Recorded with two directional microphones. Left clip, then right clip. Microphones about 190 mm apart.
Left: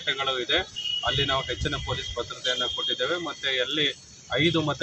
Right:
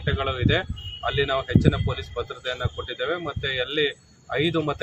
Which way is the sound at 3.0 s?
15° right (ahead or behind).